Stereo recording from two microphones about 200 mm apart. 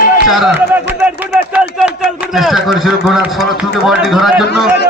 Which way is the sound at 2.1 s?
Centre (ahead or behind).